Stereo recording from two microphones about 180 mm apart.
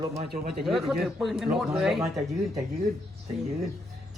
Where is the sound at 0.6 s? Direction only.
Centre (ahead or behind).